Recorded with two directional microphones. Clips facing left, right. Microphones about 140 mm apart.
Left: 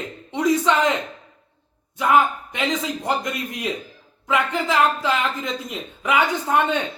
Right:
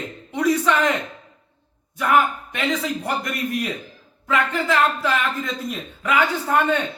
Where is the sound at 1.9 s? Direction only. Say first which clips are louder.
Left 1 dB; 20° left (ahead or behind).